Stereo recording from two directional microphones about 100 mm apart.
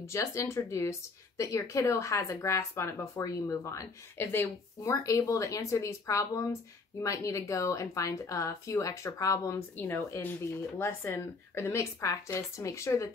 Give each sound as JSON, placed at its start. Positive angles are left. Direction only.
{"t": 0.0, "sound": "a woman's voice", "side_deg": 30}